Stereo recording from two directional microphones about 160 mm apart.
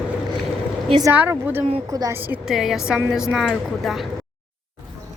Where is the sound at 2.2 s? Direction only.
10° right (ahead or behind).